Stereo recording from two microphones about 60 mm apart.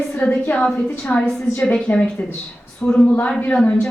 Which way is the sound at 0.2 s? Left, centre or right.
Left.